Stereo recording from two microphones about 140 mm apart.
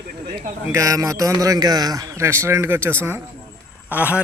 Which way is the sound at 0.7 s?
25° right (ahead or behind).